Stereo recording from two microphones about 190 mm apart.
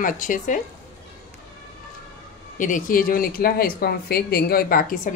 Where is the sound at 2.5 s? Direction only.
45° left (ahead or behind).